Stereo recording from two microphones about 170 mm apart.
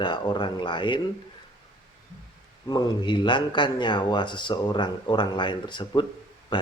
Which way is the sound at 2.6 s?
25° left (ahead or behind).